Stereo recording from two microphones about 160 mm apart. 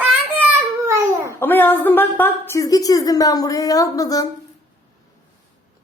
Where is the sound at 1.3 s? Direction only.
15° left (ahead or behind).